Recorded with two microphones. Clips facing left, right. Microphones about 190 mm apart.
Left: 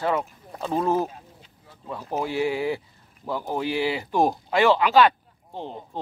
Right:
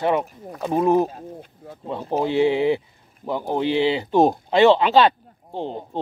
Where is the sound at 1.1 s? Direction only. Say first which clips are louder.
Right 11 dB; 45° right (ahead or behind).